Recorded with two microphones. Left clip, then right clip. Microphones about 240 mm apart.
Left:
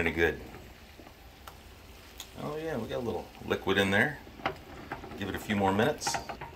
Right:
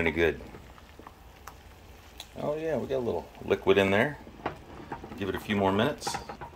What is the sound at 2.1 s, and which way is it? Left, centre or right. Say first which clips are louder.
Speech: right 6 dB; centre.